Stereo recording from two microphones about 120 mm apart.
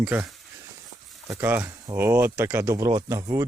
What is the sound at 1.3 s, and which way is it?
Speech, 20° right (ahead or behind).